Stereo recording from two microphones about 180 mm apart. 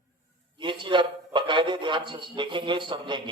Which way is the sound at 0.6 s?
25° right (ahead or behind).